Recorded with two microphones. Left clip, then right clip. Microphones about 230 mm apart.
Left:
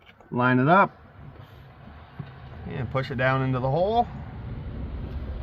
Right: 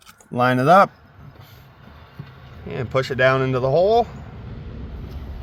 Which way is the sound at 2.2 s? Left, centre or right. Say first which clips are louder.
Right 1 dB; centre.